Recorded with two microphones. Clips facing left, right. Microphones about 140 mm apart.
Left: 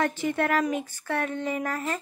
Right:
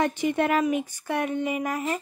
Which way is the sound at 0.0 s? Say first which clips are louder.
Right 2 dB; 15° right (ahead or behind).